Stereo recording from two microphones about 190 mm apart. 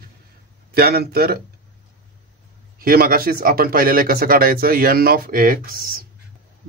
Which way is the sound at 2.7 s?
50° right (ahead or behind).